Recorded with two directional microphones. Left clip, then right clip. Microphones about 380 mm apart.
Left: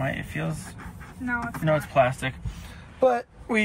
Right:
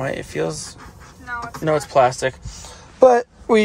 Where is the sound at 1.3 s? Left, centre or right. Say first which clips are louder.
Right 4 dB; centre.